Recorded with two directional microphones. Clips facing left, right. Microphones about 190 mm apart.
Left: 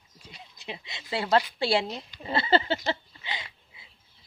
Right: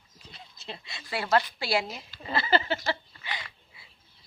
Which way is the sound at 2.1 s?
25° left (ahead or behind).